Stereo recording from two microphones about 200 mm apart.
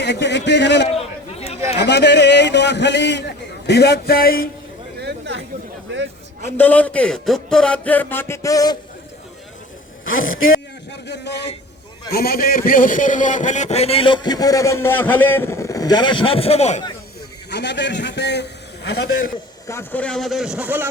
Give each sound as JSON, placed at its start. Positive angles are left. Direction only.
{"t": 0.0, "sound": "a man's voice", "side_deg": 60}
{"t": 0.9, "sound": "chatter", "side_deg": 30}
{"t": 1.8, "sound": "a man's voice", "side_deg": 60}
{"t": 4.9, "sound": "a sound", "side_deg": -60}
{"t": 6.6, "sound": "speech", "side_deg": 10}
{"t": 10.1, "sound": "a man's voice", "side_deg": 80}
{"t": 11.0, "sound": "a man's voice", "side_deg": 60}
{"t": 12.1, "sound": "a man's voice", "side_deg": 50}
{"t": 17.5, "sound": "a man's voice", "side_deg": 60}
{"t": 19.6, "sound": "a man's voice", "side_deg": 10}